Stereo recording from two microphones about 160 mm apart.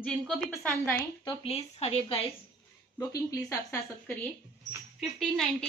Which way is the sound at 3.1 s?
20° left (ahead or behind).